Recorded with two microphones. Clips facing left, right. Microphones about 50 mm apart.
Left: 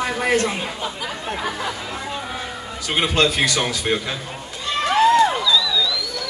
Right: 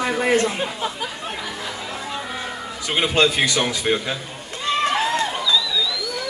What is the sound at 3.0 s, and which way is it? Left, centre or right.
Speech, right.